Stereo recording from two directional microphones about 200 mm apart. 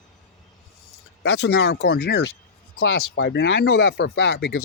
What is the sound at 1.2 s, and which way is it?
Speech, 55° left (ahead or behind).